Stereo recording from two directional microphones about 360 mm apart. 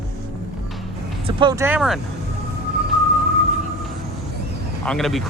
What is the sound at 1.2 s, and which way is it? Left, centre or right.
Speech, centre.